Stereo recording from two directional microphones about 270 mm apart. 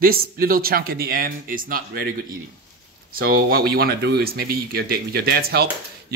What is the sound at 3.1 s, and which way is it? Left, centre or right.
Speech, right.